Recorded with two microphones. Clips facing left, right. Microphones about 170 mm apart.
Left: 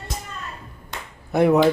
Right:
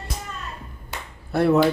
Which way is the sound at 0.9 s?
5° right (ahead or behind).